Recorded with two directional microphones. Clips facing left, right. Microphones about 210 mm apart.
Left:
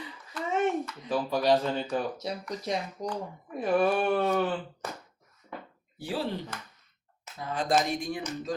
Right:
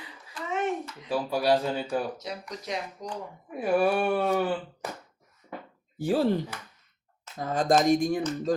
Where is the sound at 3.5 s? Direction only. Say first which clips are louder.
Right 1 dB; 10° right (ahead or behind).